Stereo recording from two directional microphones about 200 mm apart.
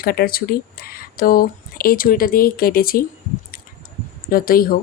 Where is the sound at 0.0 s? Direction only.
50° left (ahead or behind).